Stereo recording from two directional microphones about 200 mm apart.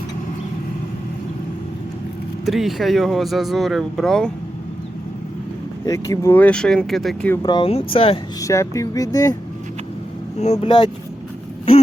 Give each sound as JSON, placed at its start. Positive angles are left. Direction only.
{"t": 2.5, "sound": "speech", "side_deg": 0}
{"t": 5.8, "sound": "speech", "side_deg": 15}
{"t": 7.4, "sound": "speech", "side_deg": 25}
{"t": 8.4, "sound": "speech", "side_deg": 15}
{"t": 10.4, "sound": "speech", "side_deg": 30}